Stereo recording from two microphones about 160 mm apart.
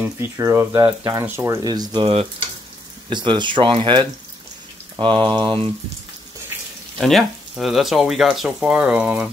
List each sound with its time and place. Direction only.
0.0 s speech: 15° right (ahead or behind)
3.1 s speech: 30° right (ahead or behind)
4.9 s a sound: 30° right (ahead or behind)
7.0 s speech: centre (ahead or behind)